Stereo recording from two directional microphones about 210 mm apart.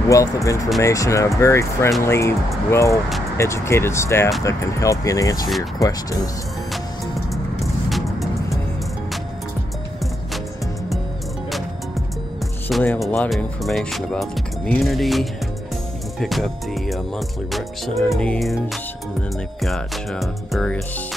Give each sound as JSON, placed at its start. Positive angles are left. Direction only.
{"t": 0.1, "sound": "speech", "side_deg": 15}
{"t": 7.9, "sound": "music", "side_deg": 0}
{"t": 12.6, "sound": "speech", "side_deg": 5}